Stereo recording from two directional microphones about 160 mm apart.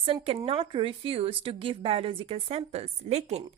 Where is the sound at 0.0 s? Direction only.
35° right (ahead or behind).